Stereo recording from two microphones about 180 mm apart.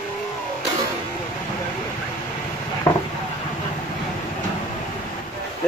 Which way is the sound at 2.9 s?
15° left (ahead or behind).